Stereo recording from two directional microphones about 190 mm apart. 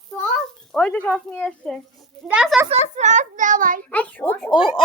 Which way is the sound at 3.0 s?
40° right (ahead or behind).